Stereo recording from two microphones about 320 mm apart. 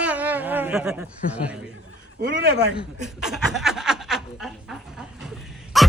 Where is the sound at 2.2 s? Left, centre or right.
Right.